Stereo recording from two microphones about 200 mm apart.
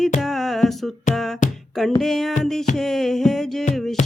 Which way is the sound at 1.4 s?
40° left (ahead or behind).